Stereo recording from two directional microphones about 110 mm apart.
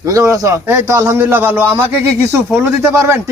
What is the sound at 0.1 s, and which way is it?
A man's voice, 30° right (ahead or behind).